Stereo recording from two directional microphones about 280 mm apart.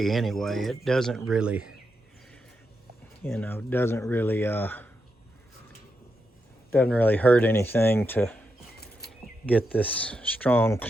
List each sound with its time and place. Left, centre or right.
0.0 s speech: centre
3.2 s speech: centre
6.9 s speech: centre
8.8 s a sound: left
9.5 s speech: centre